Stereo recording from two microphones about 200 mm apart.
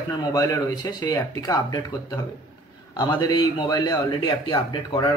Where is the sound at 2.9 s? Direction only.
20° left (ahead or behind).